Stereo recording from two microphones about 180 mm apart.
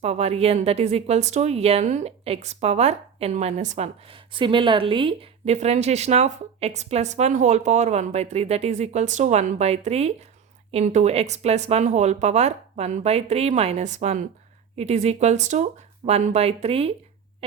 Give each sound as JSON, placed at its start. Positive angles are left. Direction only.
{"t": 0.0, "sound": "a woman's voice", "side_deg": -35}